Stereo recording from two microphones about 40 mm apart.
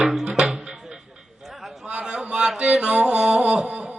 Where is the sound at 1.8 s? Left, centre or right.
Right.